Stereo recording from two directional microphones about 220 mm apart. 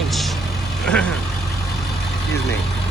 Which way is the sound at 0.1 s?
Centre (ahead or behind).